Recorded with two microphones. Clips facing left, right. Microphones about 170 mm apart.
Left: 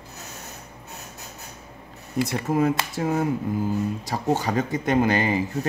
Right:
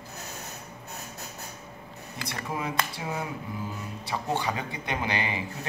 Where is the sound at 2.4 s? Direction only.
45° left (ahead or behind).